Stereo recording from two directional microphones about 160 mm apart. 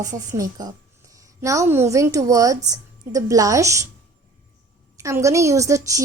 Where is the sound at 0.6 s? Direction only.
25° right (ahead or behind).